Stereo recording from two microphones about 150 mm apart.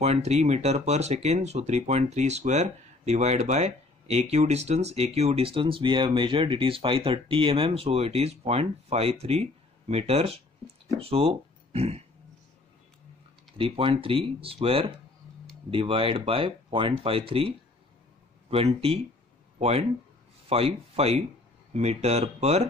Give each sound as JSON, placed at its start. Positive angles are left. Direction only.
{"t": 0.0, "sound": "speech", "side_deg": -45}
{"t": 13.6, "sound": "speech", "side_deg": -35}